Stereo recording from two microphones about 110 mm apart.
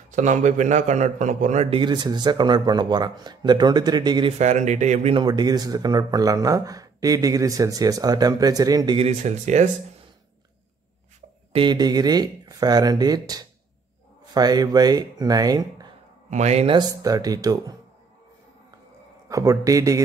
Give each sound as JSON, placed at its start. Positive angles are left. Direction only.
{"t": 0.1, "sound": "a man's voice", "side_deg": -90}
{"t": 1.8, "sound": "speech", "side_deg": -40}
{"t": 4.4, "sound": "a man's voice", "side_deg": -90}
{"t": 5.1, "sound": "speech", "side_deg": -40}
{"t": 8.9, "sound": "a man's voice", "side_deg": -80}
{"t": 11.5, "sound": "speech", "side_deg": -45}
{"t": 16.3, "sound": "speech", "side_deg": -90}
{"t": 16.6, "sound": "speech", "side_deg": -45}
{"t": 16.9, "sound": "speech", "side_deg": -35}
{"t": 19.2, "sound": "speech", "side_deg": -30}